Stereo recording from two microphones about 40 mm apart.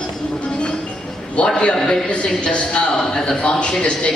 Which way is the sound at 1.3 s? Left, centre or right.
Left.